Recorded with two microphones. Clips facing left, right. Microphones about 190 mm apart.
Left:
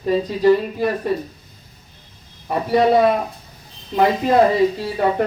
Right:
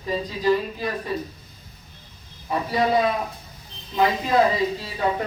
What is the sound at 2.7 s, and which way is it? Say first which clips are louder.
Speech: left 7 dB; 55° left (ahead or behind).